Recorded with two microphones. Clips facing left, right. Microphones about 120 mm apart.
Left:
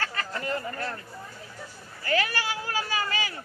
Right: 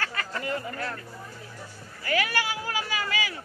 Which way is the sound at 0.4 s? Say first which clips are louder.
Even; 15° right (ahead or behind).